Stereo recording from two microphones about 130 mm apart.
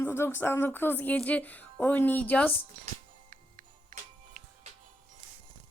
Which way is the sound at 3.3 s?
90° right.